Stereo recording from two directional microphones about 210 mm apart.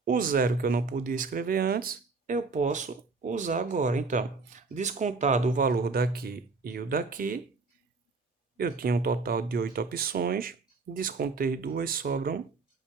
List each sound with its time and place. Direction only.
0.0 s speech: 40° right (ahead or behind)
8.5 s speech: 45° right (ahead or behind)